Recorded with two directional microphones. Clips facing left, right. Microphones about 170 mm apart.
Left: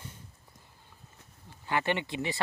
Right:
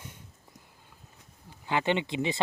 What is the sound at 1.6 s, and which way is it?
Speech, 15° right (ahead or behind).